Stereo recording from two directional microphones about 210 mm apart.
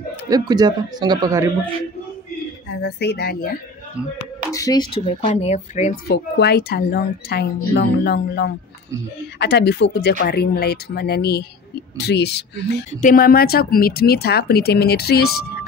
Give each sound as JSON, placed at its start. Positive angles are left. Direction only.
{"t": 0.3, "sound": "speech", "side_deg": -20}
{"t": 2.7, "sound": "a woman's voice", "side_deg": 55}
{"t": 4.5, "sound": "speech", "side_deg": 15}
{"t": 6.0, "sound": "a woman's voice", "side_deg": 50}